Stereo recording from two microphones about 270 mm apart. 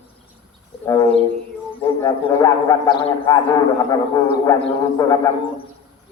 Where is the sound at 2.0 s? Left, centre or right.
Centre.